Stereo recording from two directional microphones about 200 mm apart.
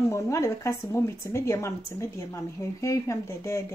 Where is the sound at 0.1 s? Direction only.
15° left (ahead or behind).